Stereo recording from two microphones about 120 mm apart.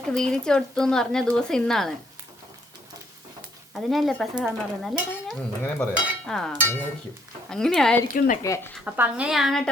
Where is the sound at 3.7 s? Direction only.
Centre (ahead or behind).